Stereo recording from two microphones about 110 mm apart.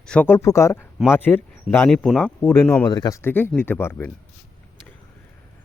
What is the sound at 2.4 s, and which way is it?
Speech, 20° left (ahead or behind).